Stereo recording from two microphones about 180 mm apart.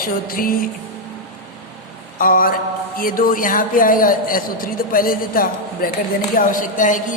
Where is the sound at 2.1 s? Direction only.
50° left (ahead or behind).